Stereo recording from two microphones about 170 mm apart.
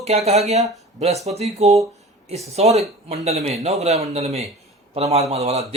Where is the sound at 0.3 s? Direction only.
40° right (ahead or behind).